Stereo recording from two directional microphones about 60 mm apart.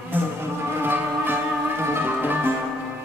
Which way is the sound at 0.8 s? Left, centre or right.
Right.